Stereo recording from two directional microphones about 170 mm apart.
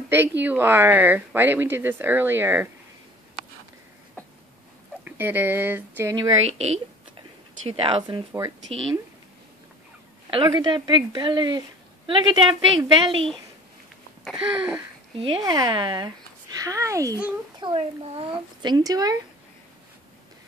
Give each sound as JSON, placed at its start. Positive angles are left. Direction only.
{"t": 0.4, "sound": "speech", "side_deg": -10}
{"t": 5.0, "sound": "speech", "side_deg": -10}
{"t": 6.4, "sound": "speech", "side_deg": -40}
{"t": 8.3, "sound": "speech", "side_deg": -15}
{"t": 10.3, "sound": "a woman's voice", "side_deg": -25}
{"t": 14.2, "sound": "speech", "side_deg": -5}
{"t": 15.1, "sound": "a woman's voice", "side_deg": -30}
{"t": 17.6, "sound": "a child's voice", "side_deg": -30}